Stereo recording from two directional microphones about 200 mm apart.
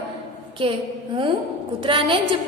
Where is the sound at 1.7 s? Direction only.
25° right (ahead or behind).